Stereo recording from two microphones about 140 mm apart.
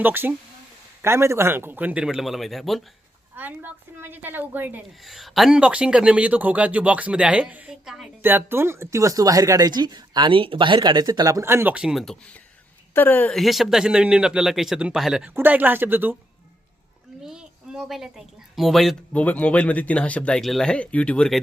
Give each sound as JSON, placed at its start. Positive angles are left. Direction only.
{"t": 0.0, "sound": "speech", "side_deg": -15}
{"t": 3.3, "sound": "speech", "side_deg": -15}
{"t": 5.0, "sound": "speech", "side_deg": 0}
{"t": 8.2, "sound": "speech", "side_deg": -15}
{"t": 12.9, "sound": "a woman's voice", "side_deg": 15}
{"t": 13.3, "sound": "a man's voice", "side_deg": 0}
{"t": 15.4, "sound": "speech", "side_deg": -10}
{"t": 17.2, "sound": "a woman's voice", "side_deg": -5}